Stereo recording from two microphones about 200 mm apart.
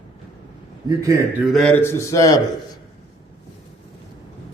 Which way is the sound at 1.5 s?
5° left (ahead or behind).